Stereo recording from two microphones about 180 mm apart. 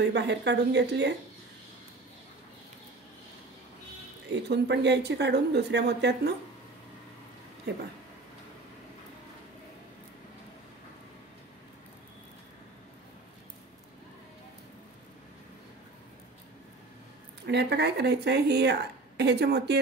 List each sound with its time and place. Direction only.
0.0 s a woman's voice: 75° right (ahead or behind)
4.3 s a woman's voice: 70° right (ahead or behind)
17.5 s a woman's voice: 65° right (ahead or behind)